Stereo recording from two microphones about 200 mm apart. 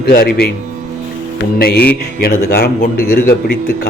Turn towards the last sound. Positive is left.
turn(degrees=45)  # may be behind; listen again after turning